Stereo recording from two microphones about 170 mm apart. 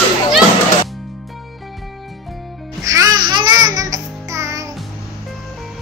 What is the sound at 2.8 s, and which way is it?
Music, 20° right (ahead or behind).